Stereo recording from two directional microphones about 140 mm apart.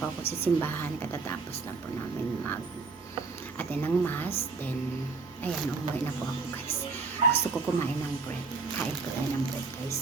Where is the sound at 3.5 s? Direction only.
15° left (ahead or behind).